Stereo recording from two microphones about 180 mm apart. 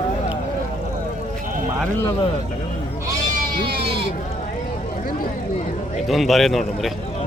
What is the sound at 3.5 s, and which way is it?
Speech, 60° right (ahead or behind).